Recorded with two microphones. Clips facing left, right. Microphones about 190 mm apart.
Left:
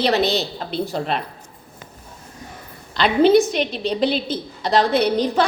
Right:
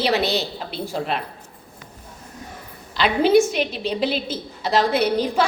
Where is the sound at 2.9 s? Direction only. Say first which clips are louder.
Left 2 dB; 5° right (ahead or behind).